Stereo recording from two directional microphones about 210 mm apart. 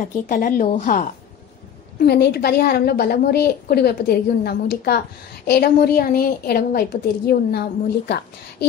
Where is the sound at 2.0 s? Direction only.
50° left (ahead or behind).